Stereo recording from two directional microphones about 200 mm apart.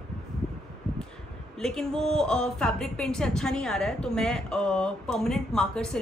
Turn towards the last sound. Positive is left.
turn(degrees=5)  # may be behind; listen again after turning